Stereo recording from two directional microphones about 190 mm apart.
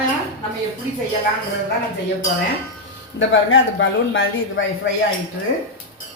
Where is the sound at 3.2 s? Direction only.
80° left.